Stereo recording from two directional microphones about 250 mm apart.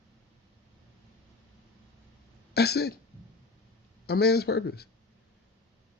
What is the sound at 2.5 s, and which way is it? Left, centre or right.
Speech, left.